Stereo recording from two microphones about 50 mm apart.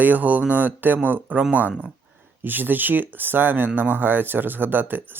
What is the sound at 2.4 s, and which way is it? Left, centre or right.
Speech, right.